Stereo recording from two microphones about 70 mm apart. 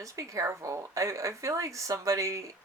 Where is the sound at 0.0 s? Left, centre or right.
Right.